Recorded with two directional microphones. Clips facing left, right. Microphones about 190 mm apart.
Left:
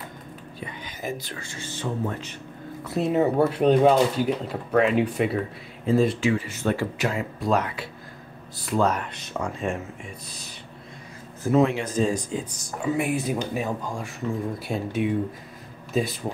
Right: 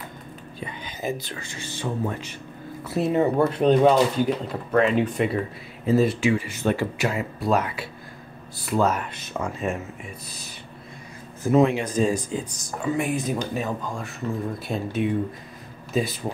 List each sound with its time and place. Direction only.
0.6 s speech: 25° right (ahead or behind); by 5.4 s 5° left (ahead or behind)
5.9 s speech: 5° right (ahead or behind)
7.1 s speech: 5° right (ahead or behind)
11.5 s speech: 15° right (ahead or behind); by 15.0 s 10° left (ahead or behind)
15.9 s speech: centre (ahead or behind)